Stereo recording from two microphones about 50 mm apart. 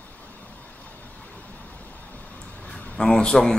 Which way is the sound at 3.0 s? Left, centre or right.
Centre.